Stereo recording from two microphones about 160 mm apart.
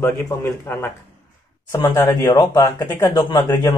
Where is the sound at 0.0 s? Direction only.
15° left (ahead or behind).